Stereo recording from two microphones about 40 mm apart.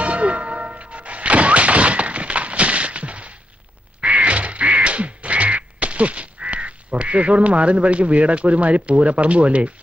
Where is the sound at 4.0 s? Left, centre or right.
Right.